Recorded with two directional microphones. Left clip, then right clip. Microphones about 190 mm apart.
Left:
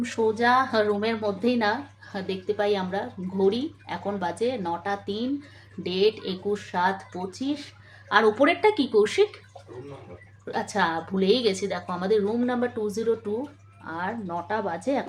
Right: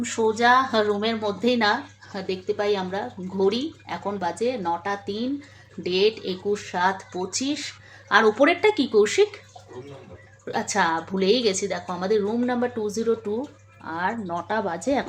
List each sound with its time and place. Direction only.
0.0 s speech: 15° right (ahead or behind)
10.4 s speech: 20° right (ahead or behind)